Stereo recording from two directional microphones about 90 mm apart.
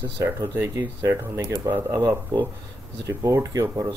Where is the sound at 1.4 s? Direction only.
40° right (ahead or behind).